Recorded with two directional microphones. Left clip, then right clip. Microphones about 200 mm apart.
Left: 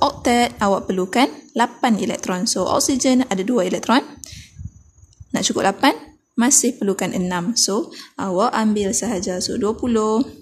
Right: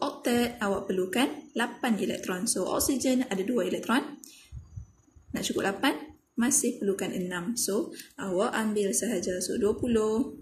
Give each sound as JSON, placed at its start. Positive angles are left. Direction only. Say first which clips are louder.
{"t": 0.0, "sound": "a woman's voice", "louder": "left 12 dB", "side_deg": 35}
{"t": 5.3, "sound": "a woman's voice", "louder": "left 11 dB", "side_deg": 35}